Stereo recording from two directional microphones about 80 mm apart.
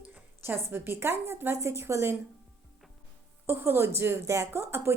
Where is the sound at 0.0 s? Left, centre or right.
Right.